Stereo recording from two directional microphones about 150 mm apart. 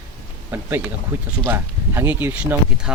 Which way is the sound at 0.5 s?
15° right (ahead or behind).